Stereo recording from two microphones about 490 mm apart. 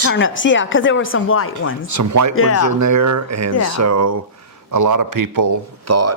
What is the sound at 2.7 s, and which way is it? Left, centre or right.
Speech, right.